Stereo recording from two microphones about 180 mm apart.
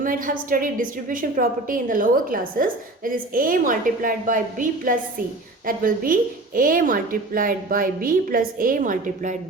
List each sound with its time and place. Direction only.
0.0 s a woman's voice: 50° right (ahead or behind)